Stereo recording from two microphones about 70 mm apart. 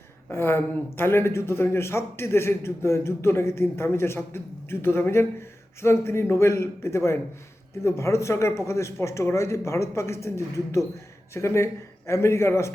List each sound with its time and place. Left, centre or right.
0.3 s a man's voice: left